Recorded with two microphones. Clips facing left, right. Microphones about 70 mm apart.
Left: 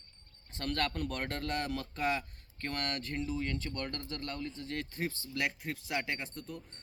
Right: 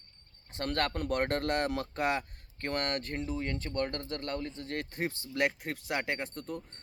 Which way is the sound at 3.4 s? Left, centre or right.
Right.